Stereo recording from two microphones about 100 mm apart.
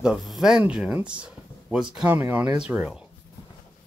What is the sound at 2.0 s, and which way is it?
Speech, 20° right (ahead or behind).